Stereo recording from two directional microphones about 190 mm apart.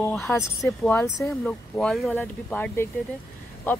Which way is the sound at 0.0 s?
5° left (ahead or behind).